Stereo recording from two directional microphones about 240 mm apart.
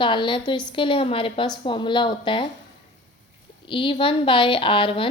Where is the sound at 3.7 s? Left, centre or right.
Left.